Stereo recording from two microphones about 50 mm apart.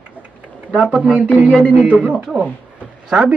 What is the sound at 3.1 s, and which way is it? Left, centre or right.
Speech, centre.